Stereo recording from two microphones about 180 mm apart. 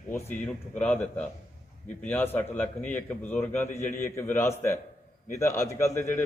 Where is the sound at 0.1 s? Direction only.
10° left (ahead or behind).